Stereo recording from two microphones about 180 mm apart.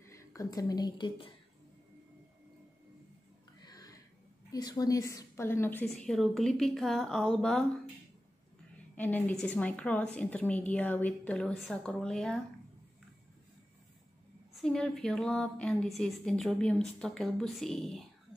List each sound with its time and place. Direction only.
0.0 s a woman's voice: 15° left (ahead or behind)
3.6 s a sound: 20° left (ahead or behind)
4.5 s a woman's voice: 20° left (ahead or behind); by 7.6 s 5° left (ahead or behind)
8.9 s a woman's voice: 10° left (ahead or behind)
14.5 s a woman's voice: 5° left (ahead or behind)